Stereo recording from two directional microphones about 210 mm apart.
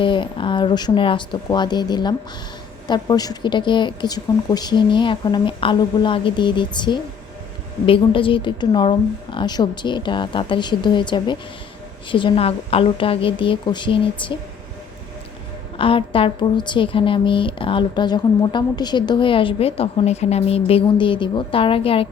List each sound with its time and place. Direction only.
0.0 s a woman's voice: 25° left (ahead or behind)
15.8 s a woman's voice: 25° left (ahead or behind)